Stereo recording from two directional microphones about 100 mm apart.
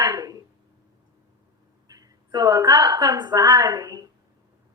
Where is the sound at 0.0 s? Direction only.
40° right (ahead or behind).